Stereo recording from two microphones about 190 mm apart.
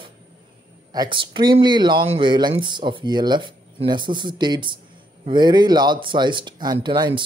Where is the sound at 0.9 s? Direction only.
25° right (ahead or behind).